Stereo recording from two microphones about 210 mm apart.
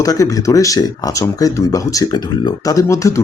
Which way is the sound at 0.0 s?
15° left (ahead or behind).